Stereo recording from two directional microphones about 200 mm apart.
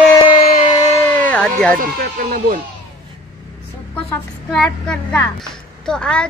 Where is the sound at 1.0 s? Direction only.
10° left (ahead or behind).